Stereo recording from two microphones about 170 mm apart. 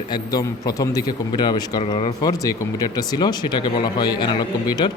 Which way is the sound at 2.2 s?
20° left (ahead or behind).